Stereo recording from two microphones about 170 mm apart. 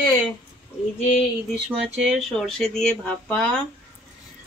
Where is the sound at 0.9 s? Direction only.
40° left (ahead or behind).